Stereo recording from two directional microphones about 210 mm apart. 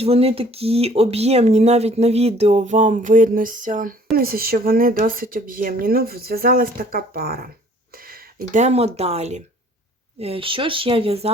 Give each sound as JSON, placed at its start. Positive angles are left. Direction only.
{"t": 0.0, "sound": "speech", "side_deg": -30}